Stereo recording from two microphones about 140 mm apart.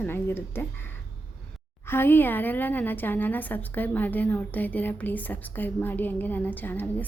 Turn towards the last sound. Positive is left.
turn(degrees=10)  # may be behind; listen again after turning